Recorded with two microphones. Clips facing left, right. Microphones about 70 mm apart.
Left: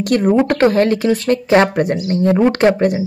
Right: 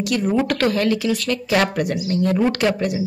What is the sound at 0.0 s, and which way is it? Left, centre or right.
Speech, left.